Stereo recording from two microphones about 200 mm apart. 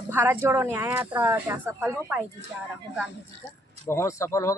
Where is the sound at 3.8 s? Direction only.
15° left (ahead or behind).